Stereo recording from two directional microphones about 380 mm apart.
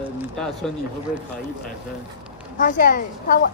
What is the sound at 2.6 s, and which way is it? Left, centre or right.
Speech, left.